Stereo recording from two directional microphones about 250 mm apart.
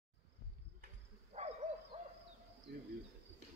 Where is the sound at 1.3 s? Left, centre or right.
Right.